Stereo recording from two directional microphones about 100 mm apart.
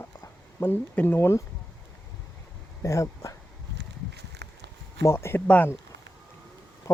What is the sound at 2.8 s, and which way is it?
Speech, 30° left (ahead or behind).